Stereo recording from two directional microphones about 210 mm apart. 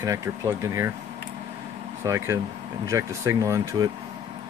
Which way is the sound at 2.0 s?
15° right (ahead or behind).